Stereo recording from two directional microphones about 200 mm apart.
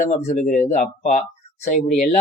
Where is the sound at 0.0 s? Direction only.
40° left (ahead or behind).